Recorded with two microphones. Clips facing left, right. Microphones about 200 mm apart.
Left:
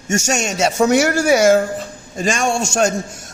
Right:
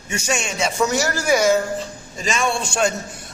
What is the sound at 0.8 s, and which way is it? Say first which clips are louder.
A man's voice: left 7 dB; 60° left (ahead or behind).